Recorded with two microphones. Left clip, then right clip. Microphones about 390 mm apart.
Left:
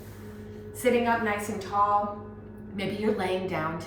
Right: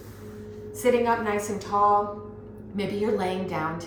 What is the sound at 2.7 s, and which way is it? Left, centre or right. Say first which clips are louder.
Speech: right 2 dB; centre.